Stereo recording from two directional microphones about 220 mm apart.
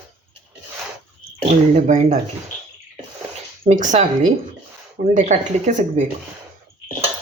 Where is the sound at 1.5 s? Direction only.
35° right (ahead or behind).